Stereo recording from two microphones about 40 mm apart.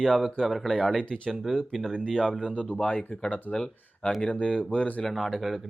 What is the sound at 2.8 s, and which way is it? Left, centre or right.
Speech, left.